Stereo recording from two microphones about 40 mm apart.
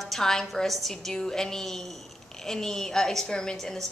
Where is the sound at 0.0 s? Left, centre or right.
Centre.